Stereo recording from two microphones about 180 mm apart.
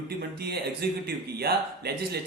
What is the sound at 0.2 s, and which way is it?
Speech, 60° right (ahead or behind).